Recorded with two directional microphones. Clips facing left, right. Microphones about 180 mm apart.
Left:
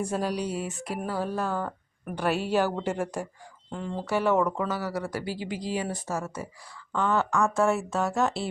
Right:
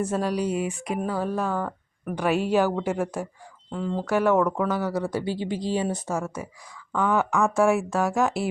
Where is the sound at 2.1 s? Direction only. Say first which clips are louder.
Right 3 dB; 10° right (ahead or behind).